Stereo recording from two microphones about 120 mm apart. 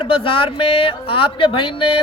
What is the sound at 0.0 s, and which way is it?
Speech, 50° left (ahead or behind).